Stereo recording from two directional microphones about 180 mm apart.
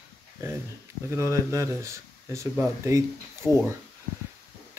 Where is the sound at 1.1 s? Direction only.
15° right (ahead or behind).